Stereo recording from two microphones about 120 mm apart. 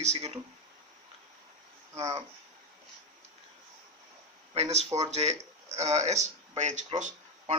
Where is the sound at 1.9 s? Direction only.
65° right (ahead or behind).